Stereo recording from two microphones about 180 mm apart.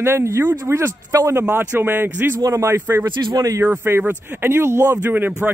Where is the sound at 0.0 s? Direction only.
15° right (ahead or behind).